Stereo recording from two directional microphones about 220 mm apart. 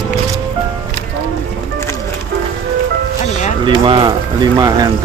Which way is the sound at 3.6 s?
20° right (ahead or behind).